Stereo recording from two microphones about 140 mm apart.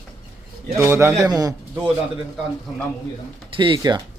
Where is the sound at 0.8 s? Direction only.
15° right (ahead or behind).